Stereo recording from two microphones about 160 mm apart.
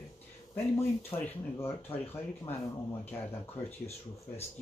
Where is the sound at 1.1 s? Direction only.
15° left (ahead or behind).